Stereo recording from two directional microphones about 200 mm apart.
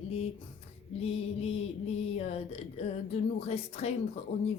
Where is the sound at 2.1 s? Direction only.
30° left (ahead or behind).